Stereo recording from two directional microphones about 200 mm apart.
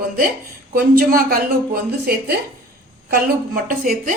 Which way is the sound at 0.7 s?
45° right (ahead or behind).